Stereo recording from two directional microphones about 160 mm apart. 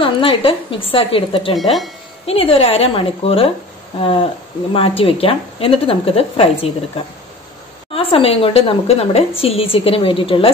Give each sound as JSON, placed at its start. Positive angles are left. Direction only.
{"t": 0.0, "sound": "a woman's voice", "side_deg": 35}
{"t": 1.5, "sound": "speech", "side_deg": 0}
{"t": 2.2, "sound": "a woman's voice", "side_deg": 35}
{"t": 7.9, "sound": "a woman's voice", "side_deg": 35}